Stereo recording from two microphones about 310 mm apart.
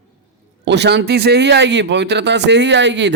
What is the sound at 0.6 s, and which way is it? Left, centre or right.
A man's voice, right.